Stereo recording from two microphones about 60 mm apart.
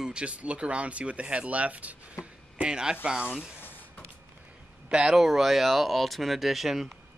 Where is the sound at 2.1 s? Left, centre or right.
Centre.